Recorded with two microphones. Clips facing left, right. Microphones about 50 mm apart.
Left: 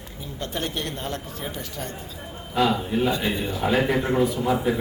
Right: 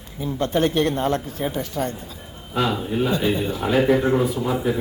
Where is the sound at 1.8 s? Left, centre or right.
Right.